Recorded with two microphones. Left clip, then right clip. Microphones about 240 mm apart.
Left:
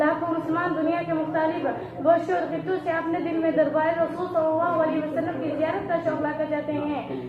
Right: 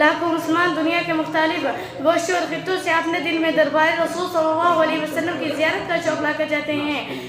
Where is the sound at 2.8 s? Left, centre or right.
Right.